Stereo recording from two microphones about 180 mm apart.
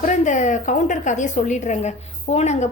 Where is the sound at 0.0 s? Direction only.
40° left (ahead or behind).